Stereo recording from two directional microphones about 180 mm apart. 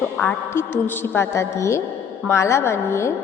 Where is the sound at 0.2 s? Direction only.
10° left (ahead or behind).